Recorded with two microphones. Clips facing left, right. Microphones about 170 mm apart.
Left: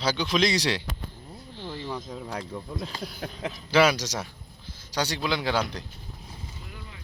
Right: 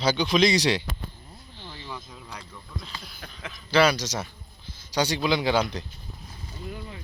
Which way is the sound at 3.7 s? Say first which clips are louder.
Even; 5° left (ahead or behind).